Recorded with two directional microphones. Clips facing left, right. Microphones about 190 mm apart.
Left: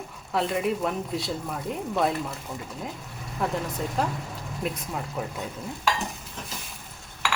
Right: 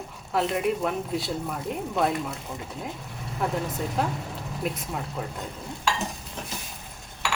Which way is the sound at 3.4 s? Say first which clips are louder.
Even; centre (ahead or behind).